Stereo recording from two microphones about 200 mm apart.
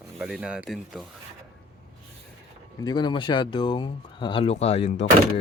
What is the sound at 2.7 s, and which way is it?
Speech, 20° left (ahead or behind).